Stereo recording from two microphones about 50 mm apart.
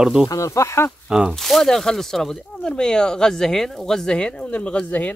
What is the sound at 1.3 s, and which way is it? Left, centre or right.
Speech, centre.